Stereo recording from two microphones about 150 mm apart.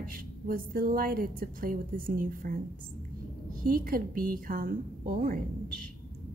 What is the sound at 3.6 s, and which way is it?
A woman's voice, 70° right (ahead or behind).